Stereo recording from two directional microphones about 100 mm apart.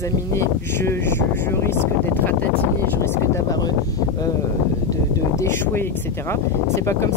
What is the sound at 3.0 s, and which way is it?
Speech, 25° left (ahead or behind).